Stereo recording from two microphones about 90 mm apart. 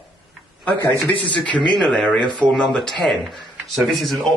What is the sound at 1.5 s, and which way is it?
Speech, 60° left (ahead or behind).